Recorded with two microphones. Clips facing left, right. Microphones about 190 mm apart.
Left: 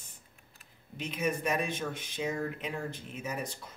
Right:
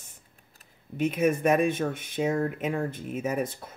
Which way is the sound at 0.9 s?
55° right (ahead or behind).